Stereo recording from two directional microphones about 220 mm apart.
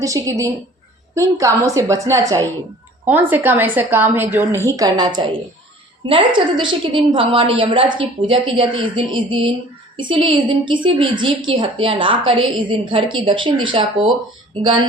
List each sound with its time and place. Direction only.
0.0 s a woman's voice: 15° right (ahead or behind)